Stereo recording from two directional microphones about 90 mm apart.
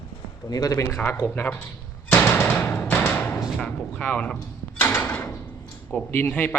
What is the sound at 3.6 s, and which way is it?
Drawer open or close, 10° left (ahead or behind).